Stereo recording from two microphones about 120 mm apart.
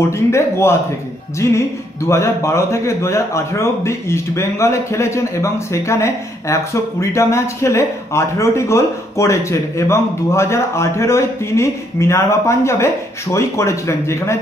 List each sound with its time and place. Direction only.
0.3 s a man's voice: 20° left (ahead or behind)